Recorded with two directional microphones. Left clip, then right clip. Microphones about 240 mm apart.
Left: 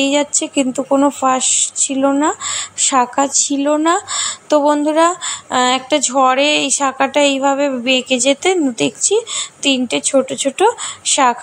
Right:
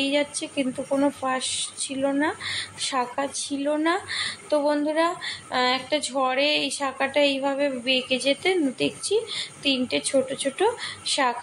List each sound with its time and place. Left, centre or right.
0.0 s speech: left